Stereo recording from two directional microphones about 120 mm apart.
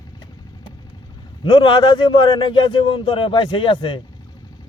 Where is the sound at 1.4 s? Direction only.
40° left (ahead or behind).